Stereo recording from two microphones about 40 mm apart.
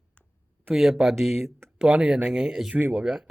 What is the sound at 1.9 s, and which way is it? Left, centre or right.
Speech, centre.